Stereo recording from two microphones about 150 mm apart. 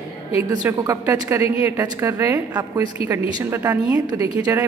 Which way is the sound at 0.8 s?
20° right (ahead or behind).